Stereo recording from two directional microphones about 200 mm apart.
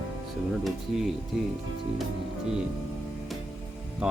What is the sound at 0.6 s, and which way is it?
Speech, centre (ahead or behind).